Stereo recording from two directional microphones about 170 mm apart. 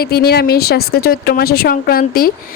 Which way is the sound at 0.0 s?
65° left (ahead or behind).